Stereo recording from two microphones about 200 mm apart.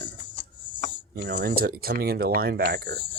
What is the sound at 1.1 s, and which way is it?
Speech, 60° right (ahead or behind).